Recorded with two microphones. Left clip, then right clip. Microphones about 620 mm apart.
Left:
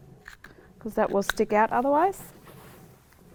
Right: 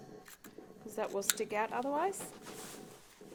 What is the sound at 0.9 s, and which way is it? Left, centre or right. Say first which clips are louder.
Speech: left 11 dB; left.